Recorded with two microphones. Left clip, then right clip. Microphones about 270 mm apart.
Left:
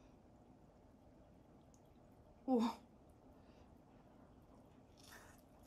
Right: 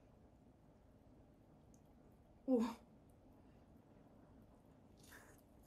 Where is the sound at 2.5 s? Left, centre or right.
Centre.